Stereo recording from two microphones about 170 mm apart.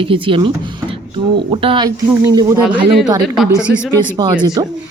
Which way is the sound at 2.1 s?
20° right (ahead or behind).